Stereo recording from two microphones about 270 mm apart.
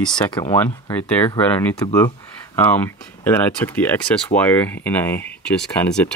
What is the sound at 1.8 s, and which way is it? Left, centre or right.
Speech, centre.